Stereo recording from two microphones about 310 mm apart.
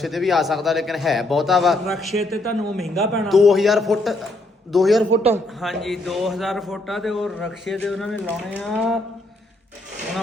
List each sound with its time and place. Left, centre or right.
0.0 s a man's voice: centre
5.1 s a man's voice: centre
5.5 s a man's voice: centre